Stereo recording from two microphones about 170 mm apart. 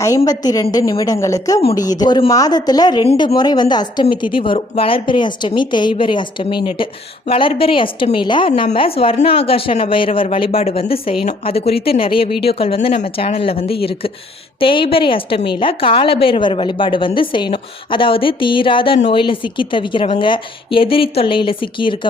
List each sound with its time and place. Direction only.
0.3 s a woman's voice: 20° left (ahead or behind)